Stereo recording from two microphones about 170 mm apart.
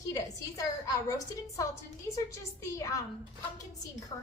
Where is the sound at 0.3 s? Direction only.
20° left (ahead or behind).